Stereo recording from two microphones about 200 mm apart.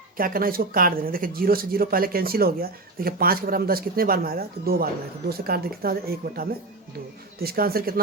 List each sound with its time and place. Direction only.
0.2 s speech: 45° right (ahead or behind)